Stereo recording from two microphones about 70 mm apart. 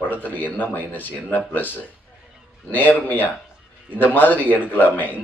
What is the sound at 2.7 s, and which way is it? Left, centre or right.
Speech, left.